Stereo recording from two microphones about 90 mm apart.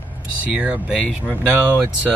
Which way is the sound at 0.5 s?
15° right (ahead or behind).